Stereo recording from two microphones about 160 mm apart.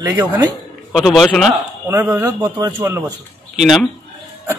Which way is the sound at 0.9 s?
Centre (ahead or behind).